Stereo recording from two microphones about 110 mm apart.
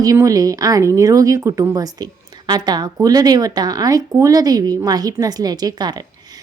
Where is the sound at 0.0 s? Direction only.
30° right (ahead or behind).